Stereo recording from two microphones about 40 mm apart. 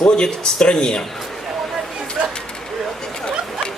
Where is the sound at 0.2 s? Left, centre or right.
Left.